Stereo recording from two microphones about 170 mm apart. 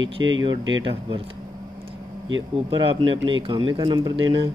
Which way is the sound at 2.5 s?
30° right (ahead or behind).